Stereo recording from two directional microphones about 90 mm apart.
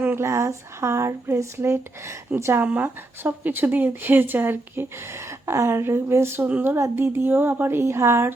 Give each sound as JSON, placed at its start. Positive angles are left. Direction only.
{"t": 0.0, "sound": "speech", "side_deg": -25}
{"t": 6.7, "sound": "speech", "side_deg": -30}